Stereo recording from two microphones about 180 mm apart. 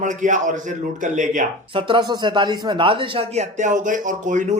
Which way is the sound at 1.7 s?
25° right (ahead or behind).